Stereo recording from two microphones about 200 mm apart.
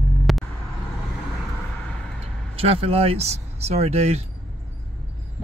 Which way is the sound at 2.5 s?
30° right (ahead or behind).